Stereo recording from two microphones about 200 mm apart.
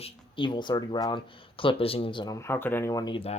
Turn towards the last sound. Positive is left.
turn(degrees=25)  # may be behind; listen again after turning